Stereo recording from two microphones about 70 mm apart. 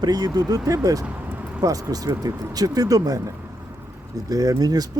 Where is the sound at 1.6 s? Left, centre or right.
Right.